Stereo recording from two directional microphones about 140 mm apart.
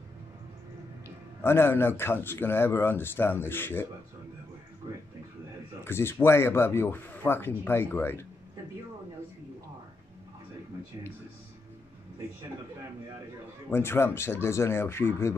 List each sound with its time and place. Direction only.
1.4 s speech: 15° left (ahead or behind)
5.9 s speech: 15° left (ahead or behind)
13.7 s speech: 15° left (ahead or behind)